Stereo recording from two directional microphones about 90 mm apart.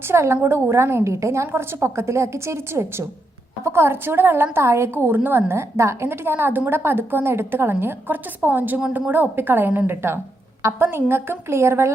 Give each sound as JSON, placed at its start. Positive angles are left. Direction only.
{"t": 0.1, "sound": "a woman's voice", "side_deg": -30}